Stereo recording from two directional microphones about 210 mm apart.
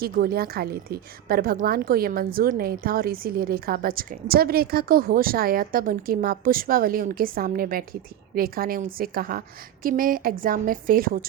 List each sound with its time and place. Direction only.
0.0 s a woman's voice: 45° right (ahead or behind)